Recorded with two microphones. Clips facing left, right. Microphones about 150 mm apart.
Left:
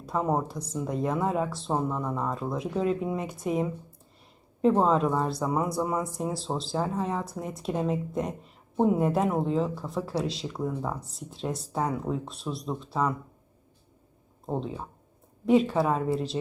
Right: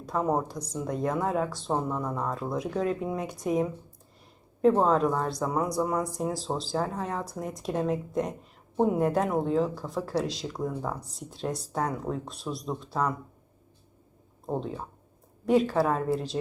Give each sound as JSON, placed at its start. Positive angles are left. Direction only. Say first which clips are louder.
{"t": 0.0, "sound": "a woman's voice", "louder": "even", "side_deg": 5}
{"t": 14.4, "sound": "speech", "louder": "even", "side_deg": 0}